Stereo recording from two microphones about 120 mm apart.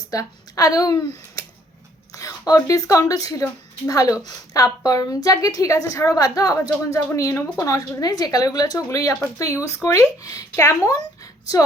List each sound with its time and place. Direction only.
0.1 s a woman's voice: 30° left (ahead or behind)